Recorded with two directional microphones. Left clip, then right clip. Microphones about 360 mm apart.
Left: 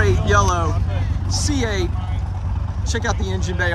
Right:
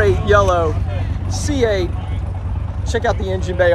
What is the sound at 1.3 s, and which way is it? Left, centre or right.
Speech, centre.